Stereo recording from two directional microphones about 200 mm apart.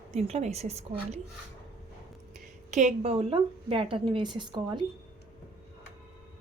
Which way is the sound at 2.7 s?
30° right (ahead or behind).